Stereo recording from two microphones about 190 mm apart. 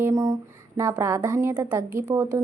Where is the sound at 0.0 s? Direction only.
15° right (ahead or behind).